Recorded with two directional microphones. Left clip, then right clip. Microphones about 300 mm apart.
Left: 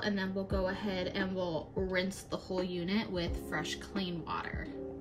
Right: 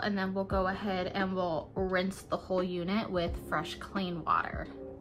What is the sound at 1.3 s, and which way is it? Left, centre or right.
Speech, right.